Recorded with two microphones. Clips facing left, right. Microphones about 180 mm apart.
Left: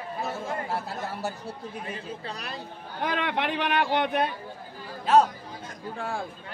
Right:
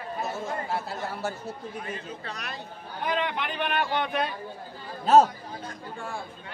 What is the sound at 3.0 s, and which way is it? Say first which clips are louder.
A man's voice: left 1 dB; 70° left (ahead or behind).